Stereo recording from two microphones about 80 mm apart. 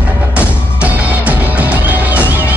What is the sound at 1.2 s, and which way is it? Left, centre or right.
Music, right.